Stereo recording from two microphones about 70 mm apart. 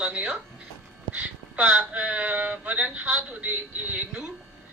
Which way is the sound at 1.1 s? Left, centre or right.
Centre.